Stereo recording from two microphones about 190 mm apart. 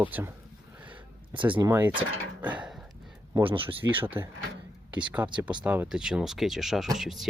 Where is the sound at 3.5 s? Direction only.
25° right (ahead or behind).